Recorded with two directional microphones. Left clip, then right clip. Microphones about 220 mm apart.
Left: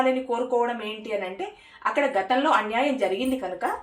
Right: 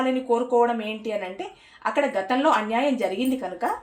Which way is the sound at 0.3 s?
45° right (ahead or behind).